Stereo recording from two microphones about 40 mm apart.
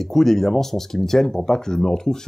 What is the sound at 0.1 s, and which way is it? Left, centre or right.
Speech, centre.